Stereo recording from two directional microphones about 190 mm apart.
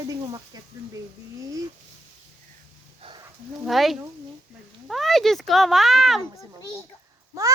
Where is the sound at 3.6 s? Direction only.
Centre (ahead or behind).